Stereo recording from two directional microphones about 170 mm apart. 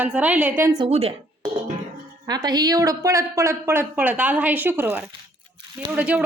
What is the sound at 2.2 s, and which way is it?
Speech, 25° right (ahead or behind).